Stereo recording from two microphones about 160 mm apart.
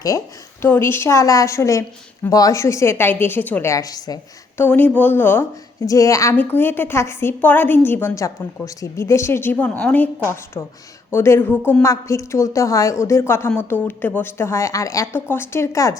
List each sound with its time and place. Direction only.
0.6 s a woman's voice: 15° left (ahead or behind)
4.6 s a woman's voice: 10° left (ahead or behind)